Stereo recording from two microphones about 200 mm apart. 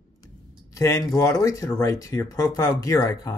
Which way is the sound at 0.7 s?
15° left (ahead or behind).